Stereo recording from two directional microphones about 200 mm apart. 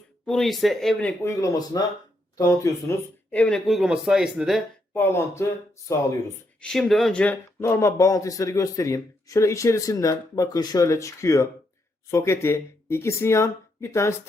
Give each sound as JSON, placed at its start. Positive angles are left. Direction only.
{"t": 0.3, "sound": "speech", "side_deg": 0}
{"t": 3.3, "sound": "speech", "side_deg": 5}
{"t": 4.9, "sound": "speech", "side_deg": 10}
{"t": 6.6, "sound": "speech", "side_deg": 0}